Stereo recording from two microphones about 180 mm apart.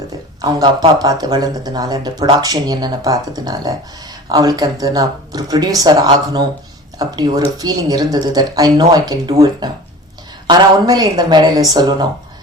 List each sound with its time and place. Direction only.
0.4 s speech: 20° right (ahead or behind)